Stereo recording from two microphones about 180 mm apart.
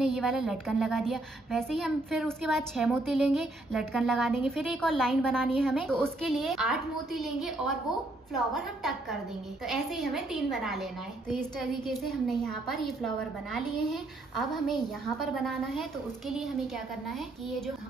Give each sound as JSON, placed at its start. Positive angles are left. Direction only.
{"t": 0.0, "sound": "a woman's voice", "side_deg": 0}